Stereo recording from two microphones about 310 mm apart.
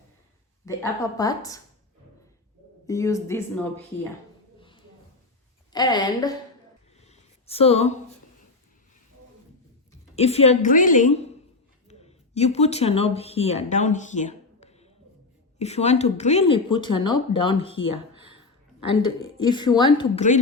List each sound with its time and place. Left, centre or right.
0.6 s speech: centre
2.8 s speech: centre
5.7 s speech: centre
7.0 s a sound: centre
10.2 s a woman's voice: centre
19.5 s speech: centre